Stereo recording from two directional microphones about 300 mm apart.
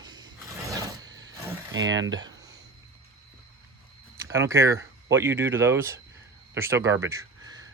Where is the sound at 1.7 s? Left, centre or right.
Right.